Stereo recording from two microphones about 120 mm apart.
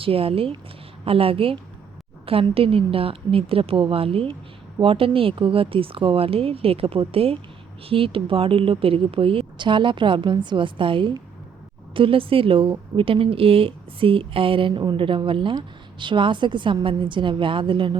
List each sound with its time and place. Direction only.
0.0 s speech: 50° right (ahead or behind)